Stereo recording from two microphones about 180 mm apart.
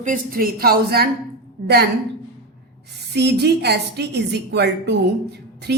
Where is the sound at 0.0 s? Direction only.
50° right (ahead or behind).